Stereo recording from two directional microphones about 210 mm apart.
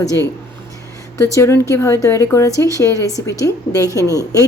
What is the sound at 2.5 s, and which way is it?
Speech, 15° right (ahead or behind).